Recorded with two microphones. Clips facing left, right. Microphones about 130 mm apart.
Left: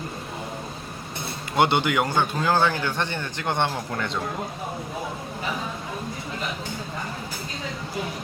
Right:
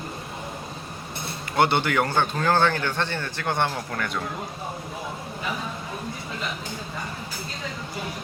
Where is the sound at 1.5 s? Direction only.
15° left (ahead or behind).